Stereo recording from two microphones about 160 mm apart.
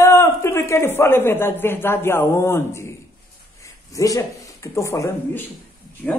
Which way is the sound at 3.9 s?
20° left (ahead or behind).